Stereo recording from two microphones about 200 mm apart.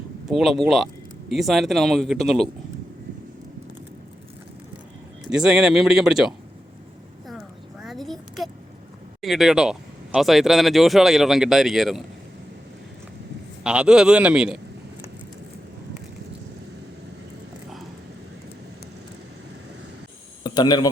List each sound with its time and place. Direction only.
0.3 s speech: centre (ahead or behind)
5.3 s speech: 5° right (ahead or behind)
7.3 s a sound: centre (ahead or behind)
9.2 s speech: centre (ahead or behind)
13.7 s speech: 5° right (ahead or behind)
20.4 s speech: 20° left (ahead or behind)